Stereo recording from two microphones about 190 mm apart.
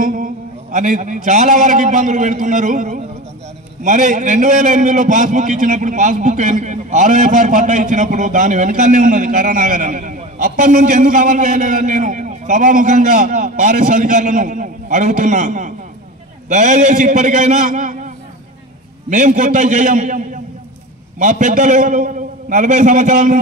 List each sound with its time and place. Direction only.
0.0 s a man's voice: 45° right (ahead or behind)